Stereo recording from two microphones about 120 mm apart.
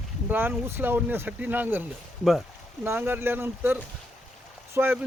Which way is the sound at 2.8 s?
20° right (ahead or behind).